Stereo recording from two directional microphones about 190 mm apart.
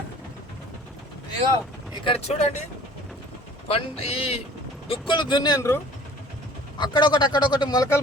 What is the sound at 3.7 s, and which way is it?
A man's voice, 30° left (ahead or behind).